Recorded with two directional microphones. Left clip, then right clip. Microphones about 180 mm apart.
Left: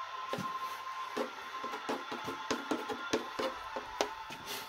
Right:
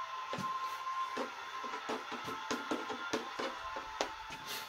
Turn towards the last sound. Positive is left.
turn(degrees=50)  # may be behind; listen again after turning